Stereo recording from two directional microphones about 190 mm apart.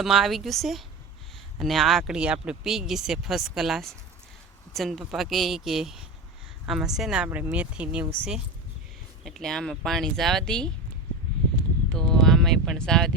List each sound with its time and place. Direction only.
0.0 s speech: centre (ahead or behind)
9.2 s speech: centre (ahead or behind)
11.9 s a sound: 5° left (ahead or behind)